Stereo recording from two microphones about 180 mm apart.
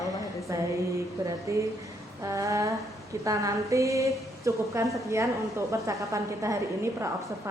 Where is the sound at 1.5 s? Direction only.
15° right (ahead or behind).